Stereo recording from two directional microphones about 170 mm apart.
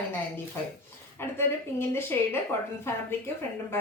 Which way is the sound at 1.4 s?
15° left (ahead or behind).